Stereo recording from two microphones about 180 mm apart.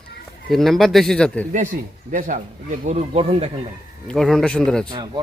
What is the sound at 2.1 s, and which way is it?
Speech, 45° right (ahead or behind).